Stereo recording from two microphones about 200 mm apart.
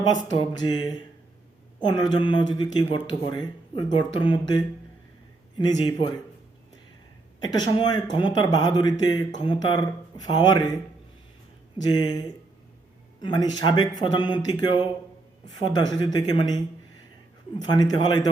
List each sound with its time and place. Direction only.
0.0 s speech: 20° left (ahead or behind)
7.4 s speech: 20° left (ahead or behind)
11.9 s speech: 20° left (ahead or behind)
13.2 s speech: 20° left (ahead or behind)
17.6 s speech: 20° left (ahead or behind)